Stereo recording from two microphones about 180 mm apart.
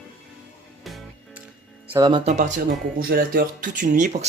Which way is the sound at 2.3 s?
45° right (ahead or behind).